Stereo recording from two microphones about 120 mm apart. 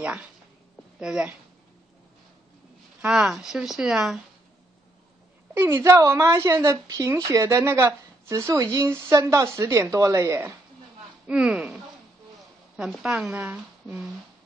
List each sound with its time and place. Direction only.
0.9 s a woman's voice: 10° right (ahead or behind)
3.0 s speech: 5° right (ahead or behind)
5.5 s a woman's voice: 20° right (ahead or behind)
11.2 s a woman's voice: 10° right (ahead or behind)